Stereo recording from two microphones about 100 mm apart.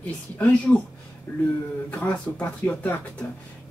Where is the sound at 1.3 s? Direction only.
20° left (ahead or behind).